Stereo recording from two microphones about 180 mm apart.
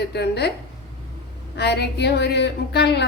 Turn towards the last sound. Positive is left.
turn(degrees=70)  # may be behind; listen again after turning